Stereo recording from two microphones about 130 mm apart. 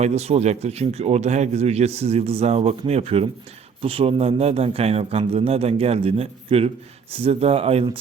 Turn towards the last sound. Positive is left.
turn(degrees=-50)  # may be behind; listen again after turning